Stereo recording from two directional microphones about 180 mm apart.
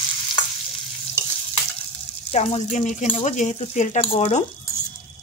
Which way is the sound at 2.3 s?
40° left (ahead or behind).